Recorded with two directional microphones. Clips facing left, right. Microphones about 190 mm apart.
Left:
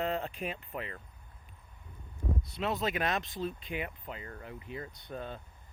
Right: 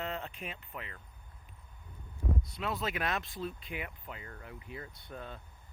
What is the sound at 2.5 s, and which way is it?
Speech, 25° left (ahead or behind).